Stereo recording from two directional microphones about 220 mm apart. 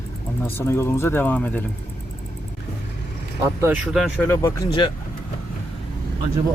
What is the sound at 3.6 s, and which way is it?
Speech, 5° right (ahead or behind).